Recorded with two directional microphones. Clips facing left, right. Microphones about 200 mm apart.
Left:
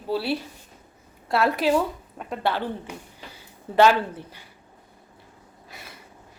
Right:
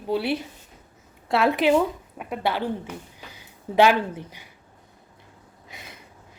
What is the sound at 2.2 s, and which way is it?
Speech, 10° right (ahead or behind).